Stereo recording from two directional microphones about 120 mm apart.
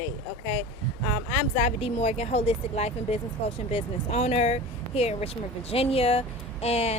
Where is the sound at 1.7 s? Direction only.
60° left (ahead or behind).